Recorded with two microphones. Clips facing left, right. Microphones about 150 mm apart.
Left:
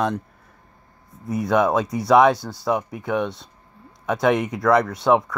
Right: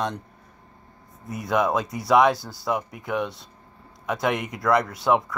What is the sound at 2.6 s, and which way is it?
Speech, 25° left (ahead or behind).